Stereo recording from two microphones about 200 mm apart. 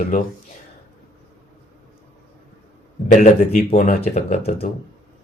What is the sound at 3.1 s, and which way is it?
Speech, 35° left (ahead or behind).